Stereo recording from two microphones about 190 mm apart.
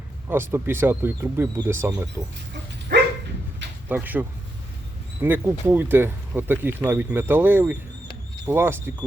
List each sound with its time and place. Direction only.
0.3 s speech: 10° right (ahead or behind)
2.9 s dog: 60° right (ahead or behind)
3.8 s speech: 10° right (ahead or behind)